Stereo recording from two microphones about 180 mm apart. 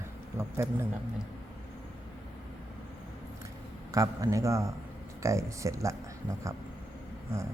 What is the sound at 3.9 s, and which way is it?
Speech, 20° right (ahead or behind).